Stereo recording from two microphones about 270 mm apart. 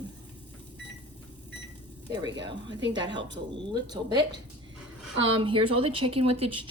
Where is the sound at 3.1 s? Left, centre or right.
Right.